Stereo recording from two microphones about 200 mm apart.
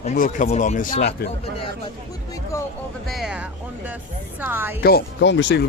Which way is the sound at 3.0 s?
Centre (ahead or behind).